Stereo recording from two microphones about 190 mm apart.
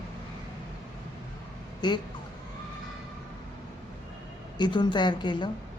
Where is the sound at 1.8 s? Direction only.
25° left (ahead or behind).